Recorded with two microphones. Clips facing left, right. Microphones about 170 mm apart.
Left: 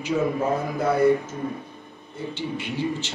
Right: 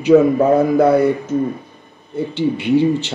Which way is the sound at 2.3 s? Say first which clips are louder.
Right 15 dB; 65° right (ahead or behind).